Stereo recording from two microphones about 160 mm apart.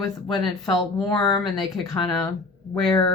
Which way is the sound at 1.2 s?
Centre (ahead or behind).